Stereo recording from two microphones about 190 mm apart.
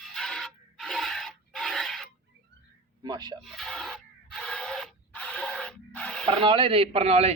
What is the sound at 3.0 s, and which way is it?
Speech, 20° right (ahead or behind).